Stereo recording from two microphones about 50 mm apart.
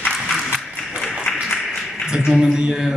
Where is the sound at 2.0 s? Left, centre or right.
Centre.